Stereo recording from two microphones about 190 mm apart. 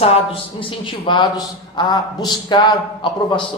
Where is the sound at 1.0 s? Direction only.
25° left (ahead or behind).